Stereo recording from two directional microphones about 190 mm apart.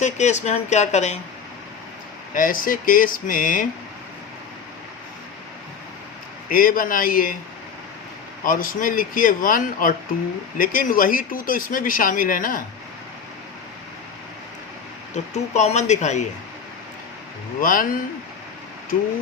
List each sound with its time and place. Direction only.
0.0 s speech: 40° left (ahead or behind)
2.3 s speech: 45° left (ahead or behind)
6.5 s speech: 45° left (ahead or behind)
8.4 s speech: 45° left (ahead or behind)
15.1 s speech: 35° left (ahead or behind)
17.6 s speech: 45° left (ahead or behind)